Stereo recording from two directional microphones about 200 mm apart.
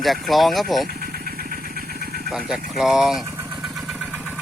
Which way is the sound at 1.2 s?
45° right (ahead or behind).